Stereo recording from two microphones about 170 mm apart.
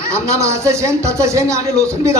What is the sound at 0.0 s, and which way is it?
A woman's voice, 15° right (ahead or behind).